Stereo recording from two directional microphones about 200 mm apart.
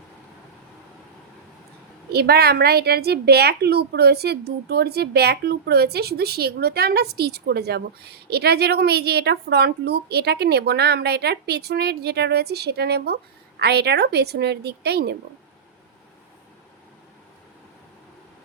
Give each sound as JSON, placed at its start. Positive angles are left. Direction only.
{"t": 2.1, "sound": "a woman's voice", "side_deg": -55}